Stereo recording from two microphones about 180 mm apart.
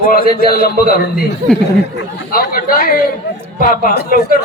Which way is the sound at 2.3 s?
55° left (ahead or behind).